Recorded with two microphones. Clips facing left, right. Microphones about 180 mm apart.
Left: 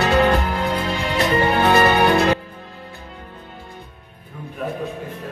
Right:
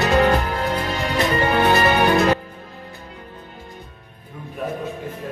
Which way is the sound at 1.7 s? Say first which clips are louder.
Left 3 dB; 40° left (ahead or behind).